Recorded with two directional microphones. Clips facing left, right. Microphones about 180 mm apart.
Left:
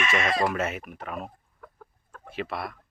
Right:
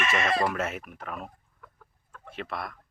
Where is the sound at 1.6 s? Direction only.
45° left (ahead or behind).